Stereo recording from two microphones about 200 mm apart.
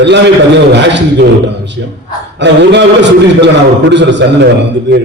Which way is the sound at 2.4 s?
60° right (ahead or behind).